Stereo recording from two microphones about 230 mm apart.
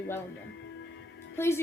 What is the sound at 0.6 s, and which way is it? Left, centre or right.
Music, left.